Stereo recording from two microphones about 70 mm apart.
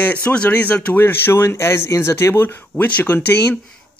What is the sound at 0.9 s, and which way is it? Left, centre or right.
A man's voice, left.